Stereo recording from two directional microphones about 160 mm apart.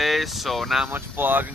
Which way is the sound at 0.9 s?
15° right (ahead or behind).